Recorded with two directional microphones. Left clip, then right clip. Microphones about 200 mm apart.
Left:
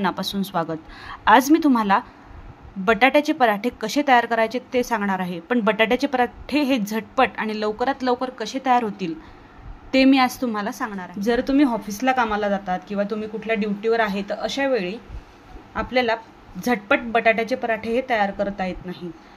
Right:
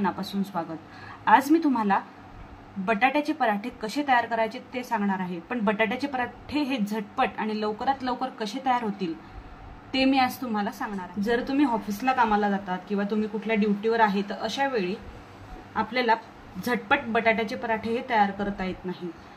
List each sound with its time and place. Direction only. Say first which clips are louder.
0.0 s a woman's voice: left 5 dB; 45° left (ahead or behind)